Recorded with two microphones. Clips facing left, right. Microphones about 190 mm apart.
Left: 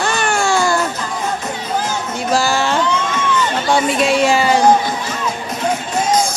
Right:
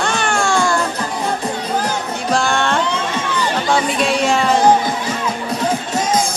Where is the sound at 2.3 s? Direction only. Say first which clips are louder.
Left 1 dB; 5° left (ahead or behind).